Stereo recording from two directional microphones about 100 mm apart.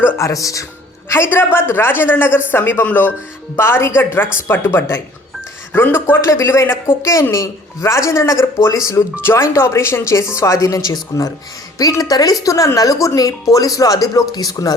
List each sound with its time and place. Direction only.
0.2 s speech: 30° left (ahead or behind)